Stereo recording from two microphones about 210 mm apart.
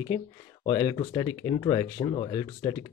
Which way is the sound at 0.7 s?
15° left (ahead or behind).